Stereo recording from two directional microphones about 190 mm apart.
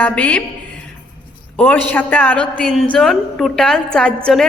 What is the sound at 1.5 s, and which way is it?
A woman's voice, 10° left (ahead or behind).